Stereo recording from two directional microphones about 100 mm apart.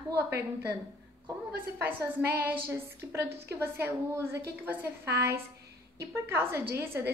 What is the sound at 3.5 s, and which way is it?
A woman's voice, 25° right (ahead or behind).